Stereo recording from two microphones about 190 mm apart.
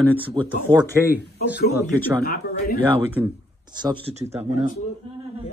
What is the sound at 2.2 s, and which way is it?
Speech, 50° left (ahead or behind).